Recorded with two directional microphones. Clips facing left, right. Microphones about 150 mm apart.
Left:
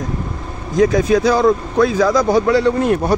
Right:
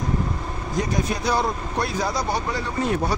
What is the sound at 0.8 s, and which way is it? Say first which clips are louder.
A man's voice: left 13 dB; 90° left.